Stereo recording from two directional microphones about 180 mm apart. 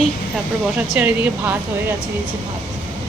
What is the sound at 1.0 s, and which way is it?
Speech, 10° right (ahead or behind).